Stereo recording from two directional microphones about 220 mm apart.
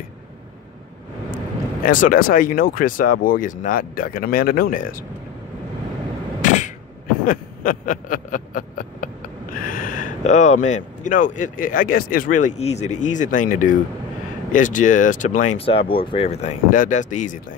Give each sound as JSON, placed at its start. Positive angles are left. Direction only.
{"t": 1.9, "sound": "speech", "side_deg": 40}
{"t": 6.4, "sound": "a sound", "side_deg": 35}
{"t": 7.2, "sound": "speech", "side_deg": 40}